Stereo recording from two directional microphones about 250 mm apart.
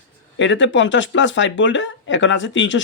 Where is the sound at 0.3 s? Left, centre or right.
Left.